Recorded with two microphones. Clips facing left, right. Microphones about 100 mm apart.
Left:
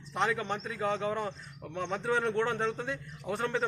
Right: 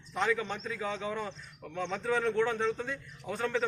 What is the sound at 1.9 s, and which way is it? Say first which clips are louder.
A man's voice: even; 20° left (ahead or behind).